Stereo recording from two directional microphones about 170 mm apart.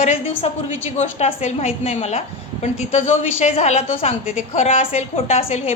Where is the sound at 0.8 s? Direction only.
40° left (ahead or behind).